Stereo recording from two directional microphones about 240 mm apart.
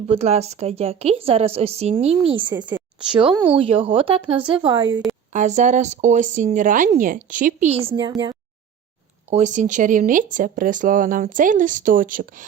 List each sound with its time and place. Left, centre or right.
0.1 s a woman's voice: right
2.6 s a sound: centre
3.1 s a woman's voice: centre
7.9 s a woman's voice: centre
9.3 s speech: right